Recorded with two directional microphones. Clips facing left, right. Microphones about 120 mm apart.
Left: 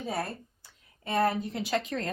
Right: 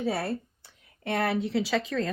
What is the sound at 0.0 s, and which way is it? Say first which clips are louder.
Speech: right 4 dB; 80° right.